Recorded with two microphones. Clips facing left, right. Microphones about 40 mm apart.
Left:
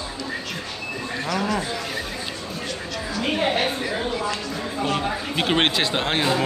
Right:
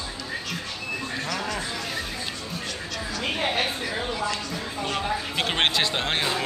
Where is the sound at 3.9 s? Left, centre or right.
Centre.